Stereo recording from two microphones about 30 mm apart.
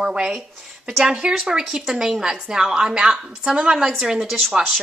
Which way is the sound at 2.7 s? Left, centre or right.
Right.